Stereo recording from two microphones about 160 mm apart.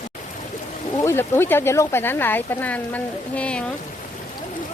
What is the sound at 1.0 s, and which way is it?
Speech, 15° left (ahead or behind).